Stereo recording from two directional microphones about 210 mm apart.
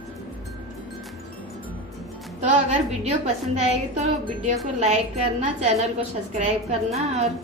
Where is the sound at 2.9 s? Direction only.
30° right (ahead or behind).